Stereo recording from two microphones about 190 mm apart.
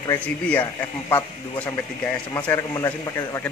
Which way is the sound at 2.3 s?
15° left (ahead or behind).